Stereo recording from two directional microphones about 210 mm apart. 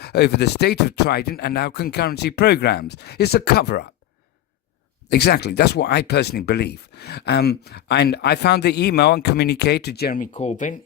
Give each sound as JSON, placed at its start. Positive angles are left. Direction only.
{"t": 0.0, "sound": "speech", "side_deg": 50}
{"t": 5.0, "sound": "speech", "side_deg": 50}